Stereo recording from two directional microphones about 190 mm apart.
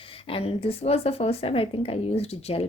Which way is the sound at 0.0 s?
30° left (ahead or behind).